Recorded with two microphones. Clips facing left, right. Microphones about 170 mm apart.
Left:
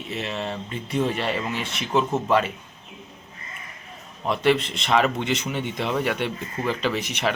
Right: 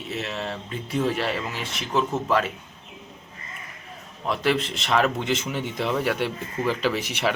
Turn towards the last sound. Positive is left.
turn(degrees=-5)  # may be behind; listen again after turning